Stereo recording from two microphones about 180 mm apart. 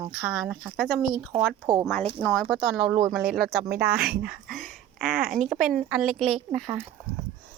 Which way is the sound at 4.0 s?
60° right (ahead or behind).